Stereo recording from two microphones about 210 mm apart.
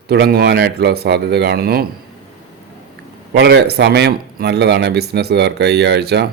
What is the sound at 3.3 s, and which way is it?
Speech, 50° right (ahead or behind).